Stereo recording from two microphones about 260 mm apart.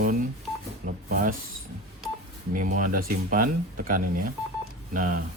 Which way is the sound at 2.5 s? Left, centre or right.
Right.